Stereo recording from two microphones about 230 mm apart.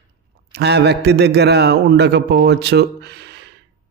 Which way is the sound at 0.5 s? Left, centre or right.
Right.